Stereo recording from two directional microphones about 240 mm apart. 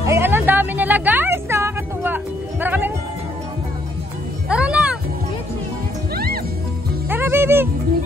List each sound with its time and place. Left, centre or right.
0.0 s a sound: centre
4.5 s music: centre
6.1 s music: right
7.1 s music: centre